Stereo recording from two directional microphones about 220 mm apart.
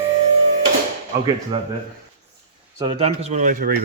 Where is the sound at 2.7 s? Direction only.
20° right (ahead or behind); by 3.8 s 40° right (ahead or behind).